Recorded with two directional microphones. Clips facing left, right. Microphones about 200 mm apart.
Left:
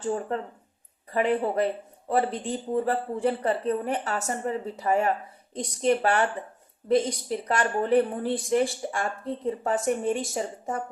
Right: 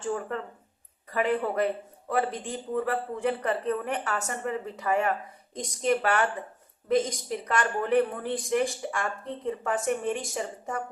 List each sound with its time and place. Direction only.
0.0 s a woman's voice: 25° left (ahead or behind)